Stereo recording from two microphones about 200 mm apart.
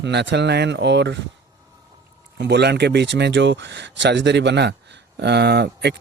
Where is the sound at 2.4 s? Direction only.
55° right (ahead or behind).